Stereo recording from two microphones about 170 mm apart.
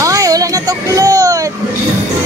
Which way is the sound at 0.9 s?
20° right (ahead or behind).